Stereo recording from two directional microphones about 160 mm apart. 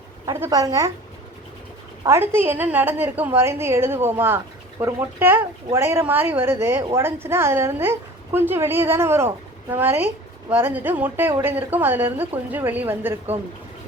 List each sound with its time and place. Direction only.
0.3 s a woman's voice: 20° right (ahead or behind)
2.0 s a woman's voice: 15° right (ahead or behind)